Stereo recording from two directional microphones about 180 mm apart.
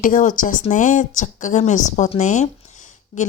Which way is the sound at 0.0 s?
45° left (ahead or behind).